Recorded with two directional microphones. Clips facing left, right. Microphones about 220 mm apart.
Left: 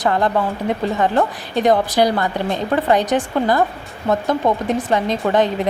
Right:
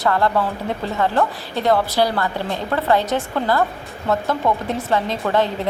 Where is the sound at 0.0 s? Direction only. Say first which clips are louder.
Left 1 dB; 20° left (ahead or behind).